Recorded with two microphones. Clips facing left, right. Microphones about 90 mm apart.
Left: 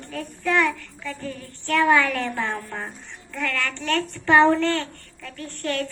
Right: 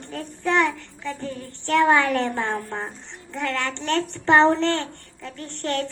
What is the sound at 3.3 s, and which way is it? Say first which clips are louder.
Child singing: right 1 dB; 25° right (ahead or behind).